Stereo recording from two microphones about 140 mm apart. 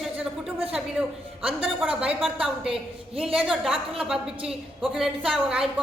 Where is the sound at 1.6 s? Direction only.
10° right (ahead or behind).